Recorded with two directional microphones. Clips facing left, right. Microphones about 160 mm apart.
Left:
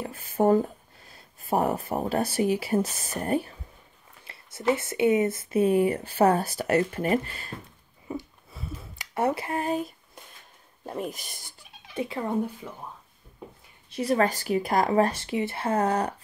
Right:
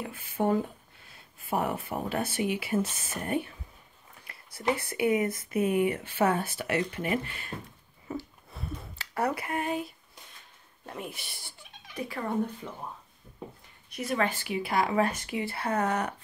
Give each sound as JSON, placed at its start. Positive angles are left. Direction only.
{"t": 0.0, "sound": "speech", "side_deg": 40}
{"t": 4.2, "sound": "speech", "side_deg": 25}
{"t": 8.1, "sound": "a sound", "side_deg": 15}
{"t": 8.5, "sound": "a sound", "side_deg": 0}
{"t": 8.9, "sound": "speech", "side_deg": 20}
{"t": 11.9, "sound": "speech", "side_deg": 25}
{"t": 13.8, "sound": "speech", "side_deg": 30}